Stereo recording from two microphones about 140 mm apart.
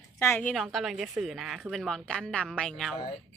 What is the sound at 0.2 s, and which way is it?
Speech, 20° left (ahead or behind).